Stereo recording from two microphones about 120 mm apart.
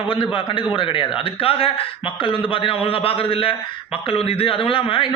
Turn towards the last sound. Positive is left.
turn(degrees=45)  # may be behind; listen again after turning